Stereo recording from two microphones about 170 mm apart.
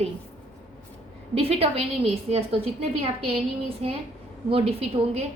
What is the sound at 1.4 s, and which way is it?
A woman's voice, 35° right (ahead or behind).